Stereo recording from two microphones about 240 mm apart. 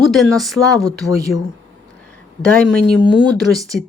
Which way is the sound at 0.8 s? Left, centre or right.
Centre.